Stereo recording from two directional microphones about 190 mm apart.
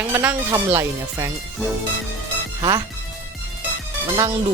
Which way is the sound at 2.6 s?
20° right (ahead or behind).